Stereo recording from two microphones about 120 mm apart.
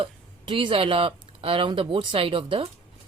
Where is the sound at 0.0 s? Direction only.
45° right (ahead or behind).